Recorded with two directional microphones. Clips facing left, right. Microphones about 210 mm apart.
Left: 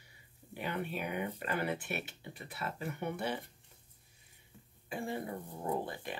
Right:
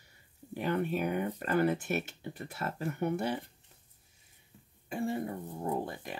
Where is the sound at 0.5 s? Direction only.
45° right (ahead or behind).